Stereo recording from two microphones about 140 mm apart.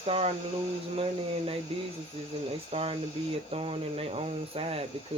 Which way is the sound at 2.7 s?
45° right (ahead or behind).